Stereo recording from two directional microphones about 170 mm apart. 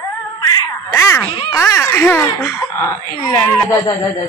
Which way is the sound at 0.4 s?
20° left (ahead or behind).